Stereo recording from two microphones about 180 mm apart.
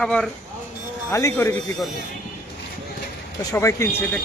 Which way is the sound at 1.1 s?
15° left (ahead or behind).